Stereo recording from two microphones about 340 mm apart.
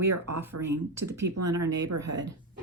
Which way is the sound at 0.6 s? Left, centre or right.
Right.